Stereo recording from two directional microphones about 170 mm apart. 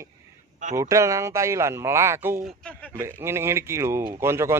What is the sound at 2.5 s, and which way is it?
Speech, 5° left (ahead or behind).